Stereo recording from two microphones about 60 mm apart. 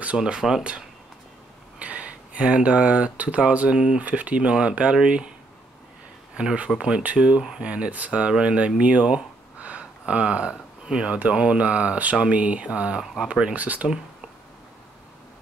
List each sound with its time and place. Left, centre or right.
0.2 s speech: centre
1.8 s speech: right
6.3 s speech: centre
13.0 s speech: centre
13.3 s speech: centre